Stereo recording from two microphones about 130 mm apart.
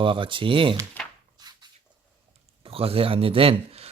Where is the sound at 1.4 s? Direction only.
35° right (ahead or behind).